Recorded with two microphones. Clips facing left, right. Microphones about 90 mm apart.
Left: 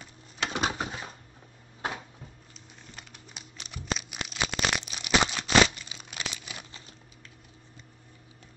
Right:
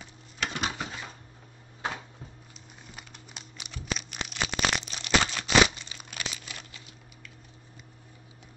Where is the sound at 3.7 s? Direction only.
5° left (ahead or behind).